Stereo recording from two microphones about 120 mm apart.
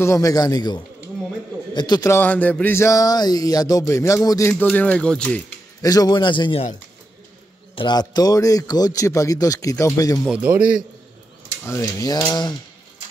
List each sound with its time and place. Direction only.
0.0 s a man's voice: 25° left (ahead or behind)
2.0 s a man's voice: 15° left (ahead or behind)
4.5 s speech: 15° left (ahead or behind)
5.8 s a sound: 30° left (ahead or behind)
7.7 s a man's voice: 40° left (ahead or behind)
10.2 s a man's voice: 10° right (ahead or behind)
11.6 s a sound: 25° left (ahead or behind)